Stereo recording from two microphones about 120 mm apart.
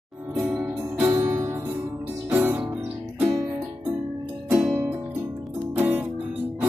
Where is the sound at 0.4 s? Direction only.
10° right (ahead or behind).